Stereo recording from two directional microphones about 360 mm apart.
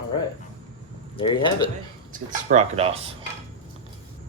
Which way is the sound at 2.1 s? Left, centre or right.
Centre.